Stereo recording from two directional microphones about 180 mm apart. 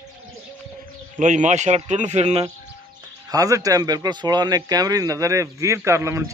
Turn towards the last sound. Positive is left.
turn(degrees=-15)  # may be behind; listen again after turning